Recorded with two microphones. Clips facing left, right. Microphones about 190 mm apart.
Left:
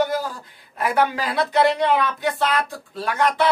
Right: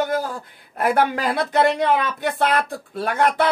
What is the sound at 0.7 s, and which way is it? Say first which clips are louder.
Speech: right 2 dB; 55° right (ahead or behind).